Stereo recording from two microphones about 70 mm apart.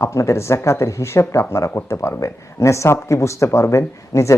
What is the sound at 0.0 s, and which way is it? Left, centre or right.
Speech, left.